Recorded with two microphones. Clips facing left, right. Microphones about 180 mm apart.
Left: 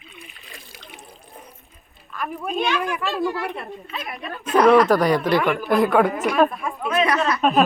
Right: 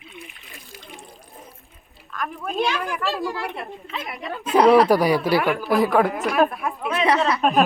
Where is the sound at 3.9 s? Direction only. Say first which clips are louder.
Right 2 dB; 20° right (ahead or behind).